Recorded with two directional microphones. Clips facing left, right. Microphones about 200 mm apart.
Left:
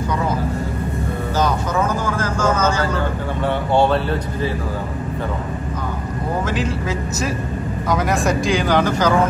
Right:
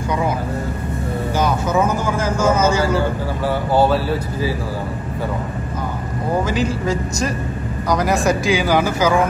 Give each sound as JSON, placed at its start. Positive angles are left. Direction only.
{"t": 2.2, "sound": "vehicle", "side_deg": -10}
{"t": 3.4, "sound": "speech", "side_deg": -5}
{"t": 6.4, "sound": "speech", "side_deg": 0}